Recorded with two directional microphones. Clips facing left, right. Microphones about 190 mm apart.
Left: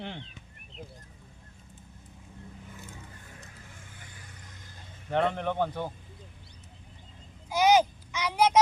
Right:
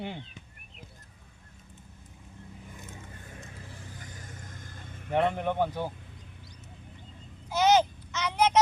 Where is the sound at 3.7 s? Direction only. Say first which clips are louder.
Right 5 dB; 40° right (ahead or behind).